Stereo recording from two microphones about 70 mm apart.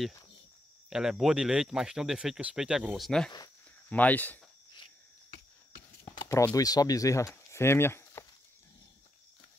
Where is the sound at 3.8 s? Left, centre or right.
Left.